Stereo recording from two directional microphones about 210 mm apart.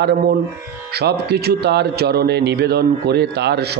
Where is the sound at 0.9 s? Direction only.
50° right (ahead or behind).